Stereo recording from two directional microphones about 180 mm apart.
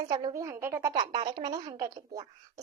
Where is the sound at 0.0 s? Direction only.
20° right (ahead or behind).